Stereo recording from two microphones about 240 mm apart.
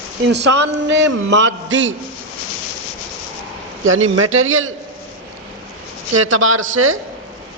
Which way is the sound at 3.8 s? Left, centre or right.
Right.